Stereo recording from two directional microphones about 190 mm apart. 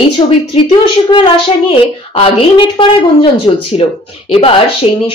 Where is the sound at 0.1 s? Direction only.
25° left (ahead or behind).